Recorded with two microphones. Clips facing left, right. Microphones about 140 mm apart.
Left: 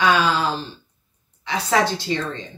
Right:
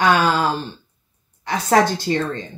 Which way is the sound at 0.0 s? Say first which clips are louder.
Right 2 dB; 50° right (ahead or behind).